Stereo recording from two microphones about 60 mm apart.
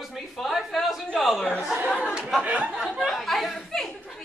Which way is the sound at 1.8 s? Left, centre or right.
Left.